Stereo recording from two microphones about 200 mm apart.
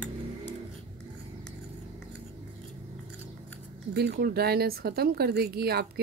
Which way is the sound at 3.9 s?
50° right (ahead or behind).